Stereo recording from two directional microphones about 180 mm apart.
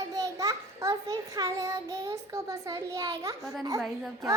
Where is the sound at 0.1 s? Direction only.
20° right (ahead or behind).